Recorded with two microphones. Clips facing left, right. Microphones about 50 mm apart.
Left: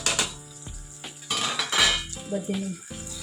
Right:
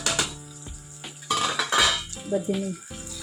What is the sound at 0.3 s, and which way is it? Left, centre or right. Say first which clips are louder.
Music: right 2 dB; centre.